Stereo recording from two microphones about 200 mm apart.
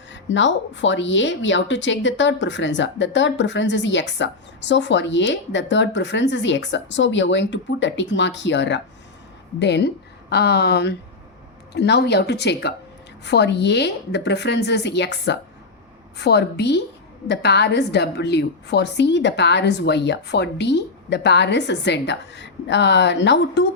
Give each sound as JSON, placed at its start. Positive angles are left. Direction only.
{"t": 0.1, "sound": "speech", "side_deg": 65}